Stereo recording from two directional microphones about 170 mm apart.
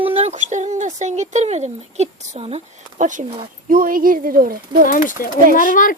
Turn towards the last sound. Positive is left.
turn(degrees=50)  # may be behind; listen again after turning